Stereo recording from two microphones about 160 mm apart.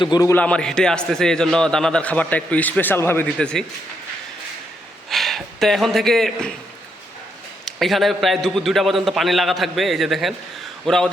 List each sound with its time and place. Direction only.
0.0 s a man's voice: 25° left (ahead or behind)
0.3 s a man's voice: 5° left (ahead or behind)
5.0 s speech: centre (ahead or behind)
7.6 s a man's voice: centre (ahead or behind)